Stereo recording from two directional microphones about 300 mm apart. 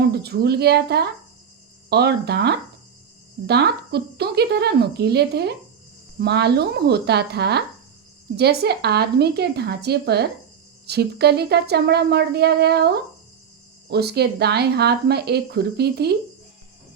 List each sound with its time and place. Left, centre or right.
0.0 s speech: right